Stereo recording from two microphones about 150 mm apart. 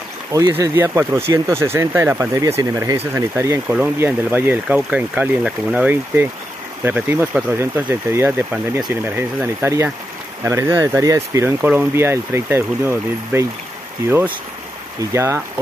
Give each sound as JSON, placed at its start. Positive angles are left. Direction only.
{"t": 0.3, "sound": "speech", "side_deg": -20}